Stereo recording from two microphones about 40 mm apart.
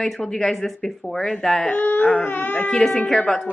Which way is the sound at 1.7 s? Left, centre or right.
Left.